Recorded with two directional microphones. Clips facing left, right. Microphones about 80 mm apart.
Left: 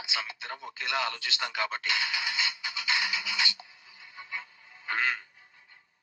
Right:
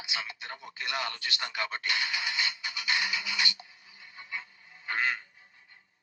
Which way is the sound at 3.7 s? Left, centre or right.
Left.